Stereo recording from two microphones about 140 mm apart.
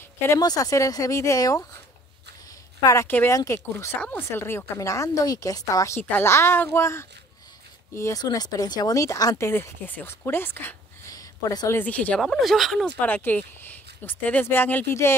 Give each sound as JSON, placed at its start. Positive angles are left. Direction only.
{"t": 0.3, "sound": "a woman's voice", "side_deg": 25}
{"t": 2.8, "sound": "a woman's voice", "side_deg": 20}
{"t": 5.9, "sound": "a woman's voice", "side_deg": 15}
{"t": 9.5, "sound": "speech", "side_deg": 15}
{"t": 11.8, "sound": "speech", "side_deg": 10}
{"t": 12.2, "sound": "speech", "side_deg": 0}
{"t": 13.0, "sound": "speech", "side_deg": 15}